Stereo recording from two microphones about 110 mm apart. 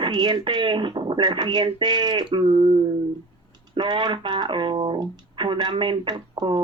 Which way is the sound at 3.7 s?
45° right (ahead or behind).